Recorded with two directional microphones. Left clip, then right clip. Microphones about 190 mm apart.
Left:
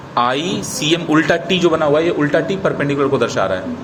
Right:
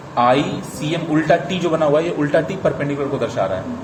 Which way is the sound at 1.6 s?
15° left (ahead or behind).